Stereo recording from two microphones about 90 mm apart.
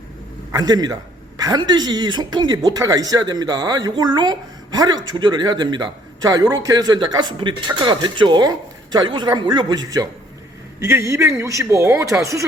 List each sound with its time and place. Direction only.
0.5 s speech: 50° right (ahead or behind)
10.8 s a man's voice: 30° right (ahead or behind)